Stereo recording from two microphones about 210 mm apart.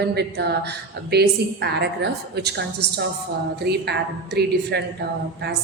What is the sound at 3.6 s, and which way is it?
Speech, 50° right (ahead or behind).